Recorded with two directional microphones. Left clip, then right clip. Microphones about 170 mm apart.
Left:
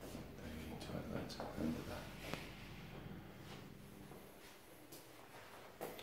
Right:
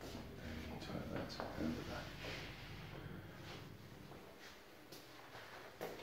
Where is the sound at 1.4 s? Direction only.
20° right (ahead or behind).